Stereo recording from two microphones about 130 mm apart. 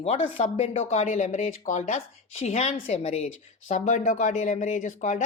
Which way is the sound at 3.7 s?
70° left (ahead or behind).